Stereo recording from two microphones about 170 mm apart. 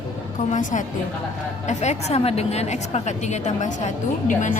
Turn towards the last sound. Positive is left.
turn(degrees=50)  # may be behind; listen again after turning